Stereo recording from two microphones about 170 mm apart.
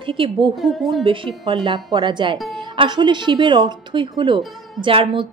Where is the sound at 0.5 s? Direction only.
Centre (ahead or behind).